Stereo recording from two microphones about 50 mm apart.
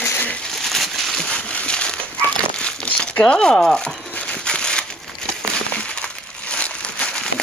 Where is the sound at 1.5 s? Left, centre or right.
Left.